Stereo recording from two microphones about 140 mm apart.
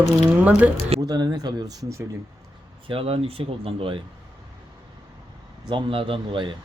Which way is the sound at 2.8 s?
40° right (ahead or behind).